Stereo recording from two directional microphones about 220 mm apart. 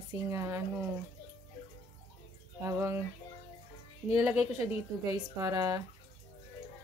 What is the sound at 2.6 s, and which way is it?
Speech, 10° right (ahead or behind).